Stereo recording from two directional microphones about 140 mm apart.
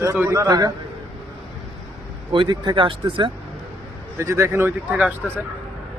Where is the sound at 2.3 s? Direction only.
30° right (ahead or behind).